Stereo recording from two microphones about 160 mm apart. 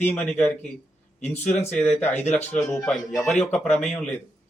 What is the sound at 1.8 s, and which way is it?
Speech, 45° left (ahead or behind).